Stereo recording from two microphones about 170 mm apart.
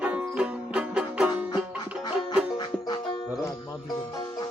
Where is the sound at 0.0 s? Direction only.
5° right (ahead or behind).